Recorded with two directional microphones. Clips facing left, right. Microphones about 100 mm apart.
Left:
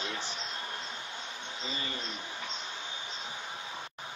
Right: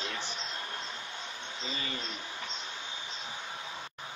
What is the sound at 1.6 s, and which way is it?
Speech, 30° left (ahead or behind).